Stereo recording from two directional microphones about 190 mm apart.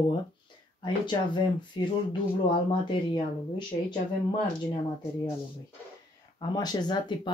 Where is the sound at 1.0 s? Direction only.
25° left (ahead or behind).